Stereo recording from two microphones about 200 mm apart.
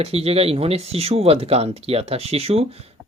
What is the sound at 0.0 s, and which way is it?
Speech, 30° right (ahead or behind).